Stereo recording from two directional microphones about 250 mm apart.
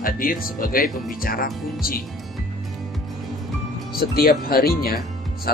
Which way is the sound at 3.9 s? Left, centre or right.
Left.